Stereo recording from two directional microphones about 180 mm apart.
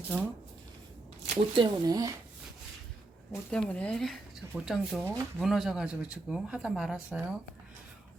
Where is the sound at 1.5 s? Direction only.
20° right (ahead or behind).